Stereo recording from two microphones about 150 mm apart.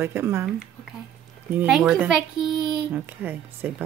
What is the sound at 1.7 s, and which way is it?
Speech, 5° right (ahead or behind).